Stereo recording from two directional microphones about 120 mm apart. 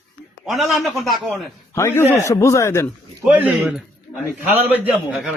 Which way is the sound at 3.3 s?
10° right (ahead or behind).